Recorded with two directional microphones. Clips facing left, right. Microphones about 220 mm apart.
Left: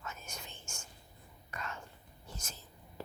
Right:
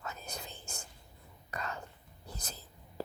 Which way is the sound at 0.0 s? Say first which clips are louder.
Right 4 dB; 35° right (ahead or behind).